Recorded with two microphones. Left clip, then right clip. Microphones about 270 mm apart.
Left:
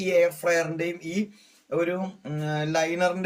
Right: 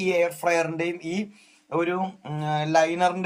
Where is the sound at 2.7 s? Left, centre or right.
Centre.